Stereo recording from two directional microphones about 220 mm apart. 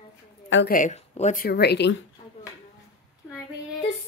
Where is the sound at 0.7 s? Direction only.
35° left (ahead or behind); by 2.0 s 50° left (ahead or behind).